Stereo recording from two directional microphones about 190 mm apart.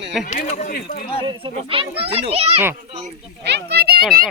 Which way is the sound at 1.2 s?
30° right (ahead or behind).